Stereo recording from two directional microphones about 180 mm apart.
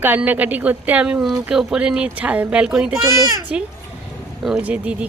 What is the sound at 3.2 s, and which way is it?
Speech, 20° right (ahead or behind).